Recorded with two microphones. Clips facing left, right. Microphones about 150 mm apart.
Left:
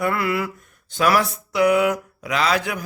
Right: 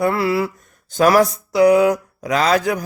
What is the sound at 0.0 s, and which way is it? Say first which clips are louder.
Mantra: right 4 dB; 30° right (ahead or behind).